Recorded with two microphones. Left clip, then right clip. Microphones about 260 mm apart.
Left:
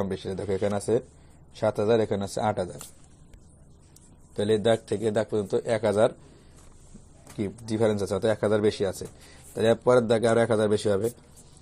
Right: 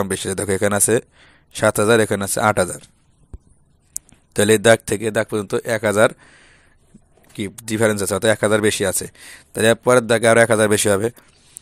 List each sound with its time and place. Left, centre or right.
0.1 s speech: right
2.4 s speech: right
3.9 s a sound: right
4.5 s speech: right
7.3 s speech: right